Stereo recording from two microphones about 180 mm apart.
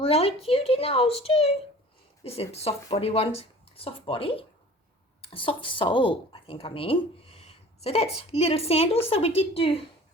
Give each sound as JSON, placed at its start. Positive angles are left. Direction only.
{"t": 0.0, "sound": "a woman's voice", "side_deg": 35}